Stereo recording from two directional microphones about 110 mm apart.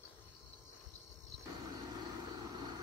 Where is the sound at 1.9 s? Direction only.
40° right (ahead or behind).